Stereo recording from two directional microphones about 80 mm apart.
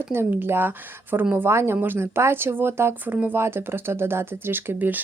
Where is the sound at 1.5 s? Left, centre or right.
Right.